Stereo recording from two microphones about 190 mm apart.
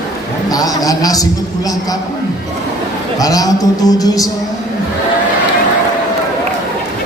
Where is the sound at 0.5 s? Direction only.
20° left (ahead or behind).